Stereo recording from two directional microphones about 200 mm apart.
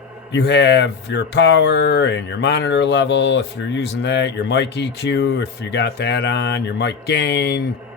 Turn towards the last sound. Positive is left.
turn(degrees=55)  # may be behind; listen again after turning